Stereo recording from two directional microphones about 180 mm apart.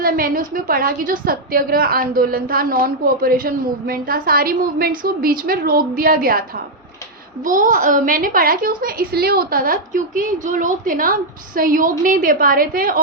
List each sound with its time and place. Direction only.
0.0 s a woman's voice: 50° right (ahead or behind)
7.4 s a woman's voice: 45° right (ahead or behind)